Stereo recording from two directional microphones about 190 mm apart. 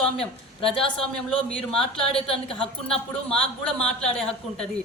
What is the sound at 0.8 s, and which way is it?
A woman's voice, 5° left (ahead or behind).